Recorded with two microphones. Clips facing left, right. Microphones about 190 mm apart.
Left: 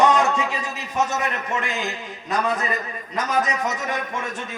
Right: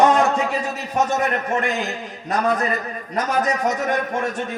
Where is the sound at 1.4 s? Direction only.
45° right (ahead or behind).